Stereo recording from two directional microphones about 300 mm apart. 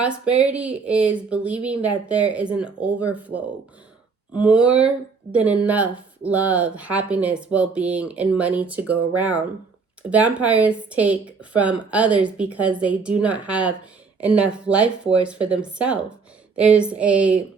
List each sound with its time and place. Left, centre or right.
0.0 s speech: centre